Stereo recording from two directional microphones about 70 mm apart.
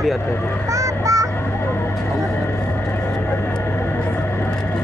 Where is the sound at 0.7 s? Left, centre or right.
Right.